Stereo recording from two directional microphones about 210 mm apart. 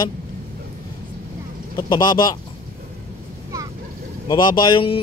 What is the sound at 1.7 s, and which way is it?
Speech, 20° left (ahead or behind).